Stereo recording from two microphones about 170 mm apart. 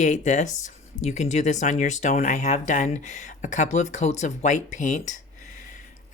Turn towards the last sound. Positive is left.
turn(degrees=45)  # may be behind; listen again after turning